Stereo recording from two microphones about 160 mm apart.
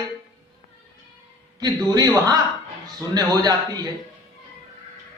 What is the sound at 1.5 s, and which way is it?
A man's voice, 25° right (ahead or behind).